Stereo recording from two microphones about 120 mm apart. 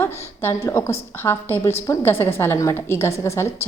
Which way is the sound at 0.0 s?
20° left (ahead or behind).